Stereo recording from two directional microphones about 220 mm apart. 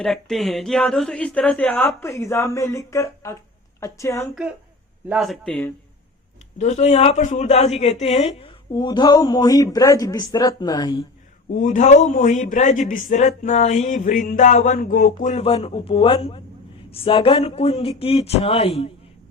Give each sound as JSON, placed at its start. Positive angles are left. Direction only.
{"t": 0.0, "sound": "a woman's voice", "side_deg": 0}
{"t": 5.0, "sound": "speech", "side_deg": 0}
{"t": 6.6, "sound": "speech", "side_deg": 30}
{"t": 11.5, "sound": "speech", "side_deg": 35}